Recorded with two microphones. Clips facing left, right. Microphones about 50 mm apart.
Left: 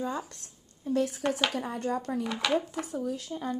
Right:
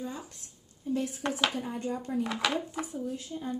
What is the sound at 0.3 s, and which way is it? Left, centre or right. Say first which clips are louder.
A woman's voice: left 2 dB; left.